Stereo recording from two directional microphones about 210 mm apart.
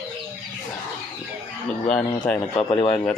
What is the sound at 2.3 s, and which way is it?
Speech, 5° left (ahead or behind).